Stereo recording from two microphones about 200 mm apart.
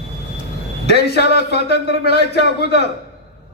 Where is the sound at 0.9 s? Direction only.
55° left (ahead or behind).